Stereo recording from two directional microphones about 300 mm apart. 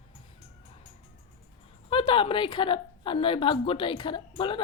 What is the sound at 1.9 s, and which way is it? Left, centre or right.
A woman's voice, centre.